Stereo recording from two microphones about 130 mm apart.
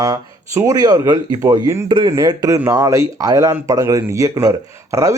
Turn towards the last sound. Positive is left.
turn(degrees=-25)  # may be behind; listen again after turning